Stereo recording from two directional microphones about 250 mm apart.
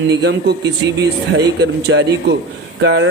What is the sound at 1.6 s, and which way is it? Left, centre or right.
A man's voice, right.